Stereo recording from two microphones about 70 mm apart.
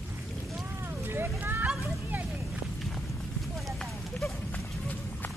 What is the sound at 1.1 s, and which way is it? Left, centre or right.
Speech, right.